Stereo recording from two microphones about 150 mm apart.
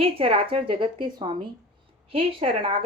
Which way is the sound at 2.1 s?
40° right (ahead or behind).